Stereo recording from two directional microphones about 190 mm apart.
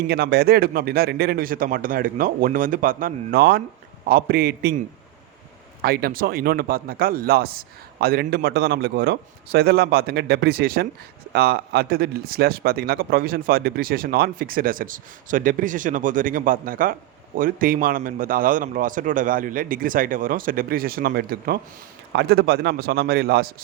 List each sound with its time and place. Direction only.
0.1 s speech: 60° right (ahead or behind)
5.8 s speech: 55° right (ahead or behind)